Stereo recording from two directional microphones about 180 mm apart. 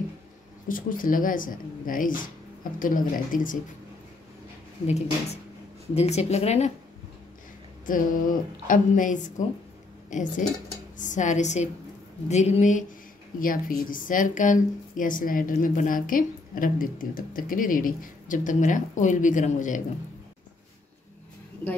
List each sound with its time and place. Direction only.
0.7 s a woman's voice: 50° left (ahead or behind)
4.8 s speech: 40° left (ahead or behind)
7.8 s a woman's voice: 50° left (ahead or behind)